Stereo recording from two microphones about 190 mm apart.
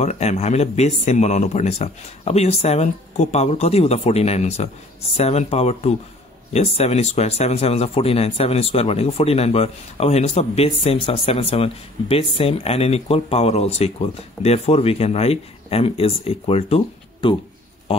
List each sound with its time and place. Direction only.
0.0 s speech: 35° left (ahead or behind)